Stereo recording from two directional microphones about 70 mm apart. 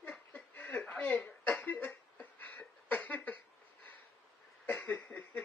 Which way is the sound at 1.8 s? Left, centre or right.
Left.